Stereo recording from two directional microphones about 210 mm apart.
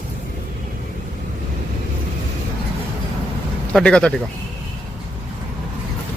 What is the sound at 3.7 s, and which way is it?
Speech, 5° left (ahead or behind).